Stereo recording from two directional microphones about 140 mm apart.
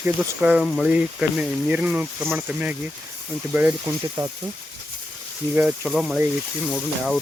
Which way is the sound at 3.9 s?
20° right (ahead or behind).